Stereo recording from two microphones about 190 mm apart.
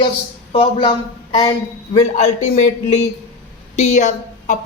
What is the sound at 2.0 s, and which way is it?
A man's voice, 35° left (ahead or behind).